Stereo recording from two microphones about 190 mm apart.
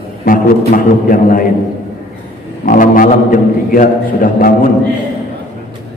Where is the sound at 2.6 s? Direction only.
45° left (ahead or behind).